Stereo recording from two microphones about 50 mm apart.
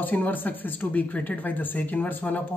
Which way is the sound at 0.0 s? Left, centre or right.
Left.